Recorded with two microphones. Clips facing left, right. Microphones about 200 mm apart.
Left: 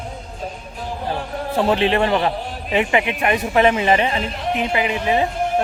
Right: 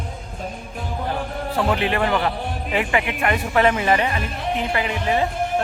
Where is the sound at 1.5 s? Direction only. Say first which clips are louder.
Left 4 dB; 25° left (ahead or behind).